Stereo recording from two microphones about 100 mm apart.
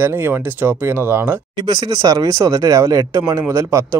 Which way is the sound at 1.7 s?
40° right (ahead or behind).